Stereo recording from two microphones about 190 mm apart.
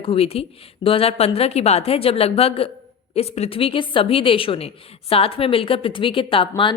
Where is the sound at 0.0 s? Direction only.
30° left (ahead or behind).